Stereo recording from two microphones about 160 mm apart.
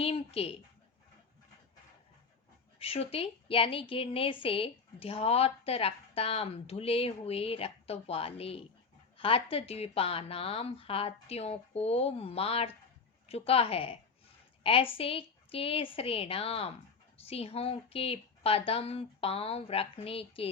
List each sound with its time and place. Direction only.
0.0 s a woman's voice: 35° left (ahead or behind)
2.7 s a woman's voice: 35° left (ahead or behind)